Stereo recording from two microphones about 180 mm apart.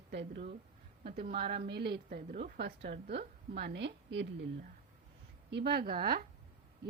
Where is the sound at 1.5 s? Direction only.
60° right (ahead or behind); by 2.5 s 45° right (ahead or behind).